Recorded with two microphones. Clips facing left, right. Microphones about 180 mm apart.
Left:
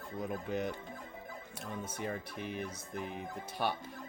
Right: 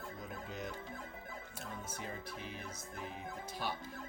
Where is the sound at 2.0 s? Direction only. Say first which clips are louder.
Left 6 dB; 60° left (ahead or behind).